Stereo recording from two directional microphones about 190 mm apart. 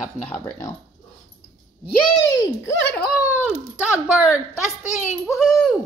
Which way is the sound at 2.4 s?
15° left (ahead or behind).